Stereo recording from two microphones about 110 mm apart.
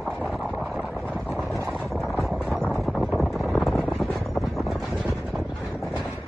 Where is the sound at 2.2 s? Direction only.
Centre (ahead or behind).